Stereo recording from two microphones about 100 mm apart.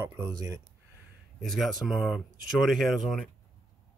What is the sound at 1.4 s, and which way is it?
Speech, centre (ahead or behind).